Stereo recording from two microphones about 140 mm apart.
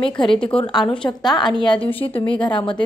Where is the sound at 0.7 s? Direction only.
5° left (ahead or behind).